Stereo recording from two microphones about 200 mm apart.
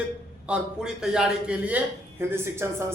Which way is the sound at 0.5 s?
5° right (ahead or behind).